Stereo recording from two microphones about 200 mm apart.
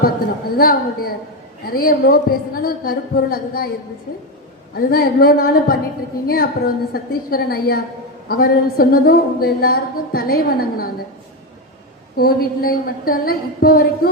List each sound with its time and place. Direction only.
0.5 s a woman's voice: 50° left (ahead or behind)
4.7 s a woman's voice: 50° left (ahead or behind)
12.1 s a woman's voice: 50° left (ahead or behind)